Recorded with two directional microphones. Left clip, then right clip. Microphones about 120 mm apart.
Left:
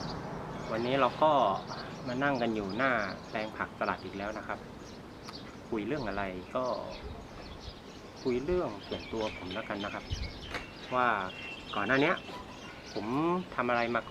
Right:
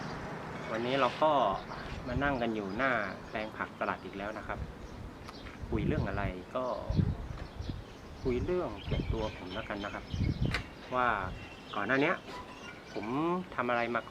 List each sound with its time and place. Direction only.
0.7 s speech: 5° right (ahead or behind)
5.7 s speech: centre (ahead or behind)
8.3 s speech: centre (ahead or behind)
10.5 s a sound: 15° right (ahead or behind)
10.9 s speech: centre (ahead or behind)